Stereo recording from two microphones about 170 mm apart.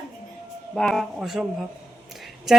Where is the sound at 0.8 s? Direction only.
Centre (ahead or behind).